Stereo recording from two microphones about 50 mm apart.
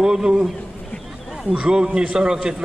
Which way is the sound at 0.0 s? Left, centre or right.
Centre.